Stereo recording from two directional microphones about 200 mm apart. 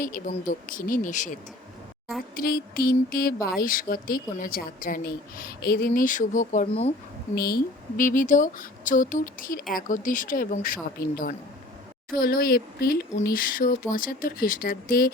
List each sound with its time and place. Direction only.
0.0 s a woman's voice: 45° left (ahead or behind)
7.3 s a woman's voice: 50° left (ahead or behind)